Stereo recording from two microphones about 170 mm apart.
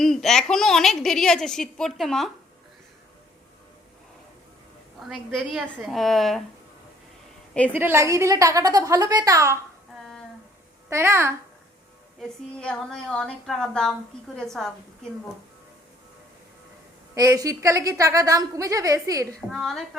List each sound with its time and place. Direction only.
0.0 s a woman's voice: centre (ahead or behind)
4.9 s a woman's voice: centre (ahead or behind)
7.7 s a woman's voice: 15° right (ahead or behind)
10.8 s a child's voice: 15° right (ahead or behind)
12.5 s a woman's voice: 5° left (ahead or behind)
17.2 s a woman's voice: 20° right (ahead or behind)
19.5 s a woman's voice: centre (ahead or behind)